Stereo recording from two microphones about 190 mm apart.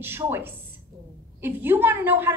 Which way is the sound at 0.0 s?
10° right (ahead or behind).